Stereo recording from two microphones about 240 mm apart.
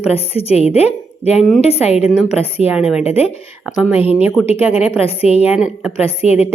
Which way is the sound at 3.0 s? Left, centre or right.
Left.